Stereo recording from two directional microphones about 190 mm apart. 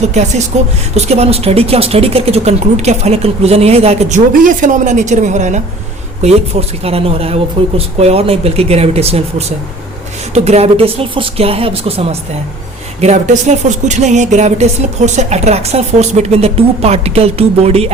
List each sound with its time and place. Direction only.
0.1 s speech: 35° right (ahead or behind)
10.3 s speech: 35° right (ahead or behind)